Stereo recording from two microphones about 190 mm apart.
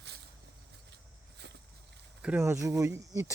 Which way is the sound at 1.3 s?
65° right (ahead or behind).